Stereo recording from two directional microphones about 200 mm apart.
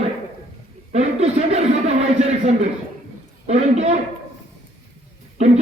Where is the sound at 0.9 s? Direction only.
35° right (ahead or behind).